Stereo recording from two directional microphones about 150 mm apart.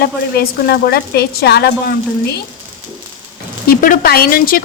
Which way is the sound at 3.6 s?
70° left (ahead or behind).